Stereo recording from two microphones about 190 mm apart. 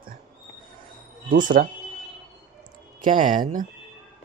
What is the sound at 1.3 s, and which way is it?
Speech, 45° right (ahead or behind).